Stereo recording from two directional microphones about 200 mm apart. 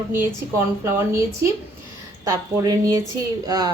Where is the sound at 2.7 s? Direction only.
15° right (ahead or behind).